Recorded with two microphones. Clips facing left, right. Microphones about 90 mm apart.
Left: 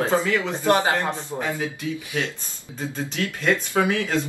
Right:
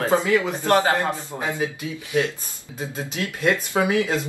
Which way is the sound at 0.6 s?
20° left (ahead or behind).